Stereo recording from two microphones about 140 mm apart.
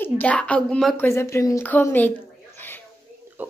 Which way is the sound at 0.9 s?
20° left (ahead or behind).